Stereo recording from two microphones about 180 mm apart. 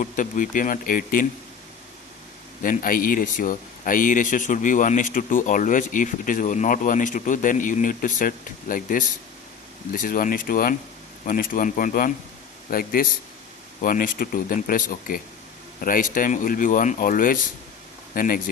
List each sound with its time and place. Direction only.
0.0 s speech: 45° left (ahead or behind)
2.6 s speech: 50° left (ahead or behind)